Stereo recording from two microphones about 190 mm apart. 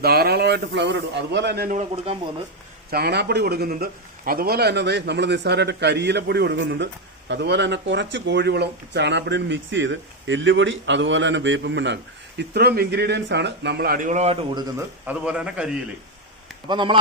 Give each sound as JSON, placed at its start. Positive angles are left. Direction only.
{"t": 0.0, "sound": "a man's voice", "side_deg": -55}
{"t": 1.7, "sound": "speech", "side_deg": -35}
{"t": 2.9, "sound": "a man's voice", "side_deg": -55}
{"t": 12.4, "sound": "a man's voice", "side_deg": -55}
{"t": 14.5, "sound": "a man's voice", "side_deg": -10}
{"t": 16.6, "sound": "speech", "side_deg": -25}